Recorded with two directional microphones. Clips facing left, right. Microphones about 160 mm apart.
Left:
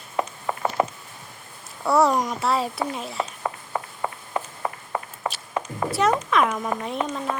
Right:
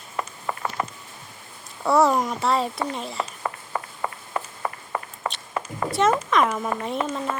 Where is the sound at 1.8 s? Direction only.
Centre (ahead or behind).